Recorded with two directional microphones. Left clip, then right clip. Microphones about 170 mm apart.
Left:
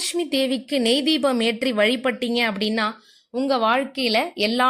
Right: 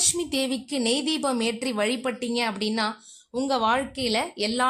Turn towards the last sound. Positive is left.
turn(degrees=15)  # may be behind; listen again after turning